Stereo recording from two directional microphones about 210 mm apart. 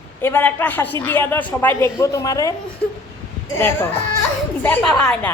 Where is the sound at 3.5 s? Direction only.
10° left (ahead or behind).